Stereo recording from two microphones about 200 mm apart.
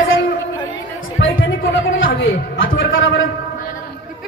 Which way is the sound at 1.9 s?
75° left (ahead or behind).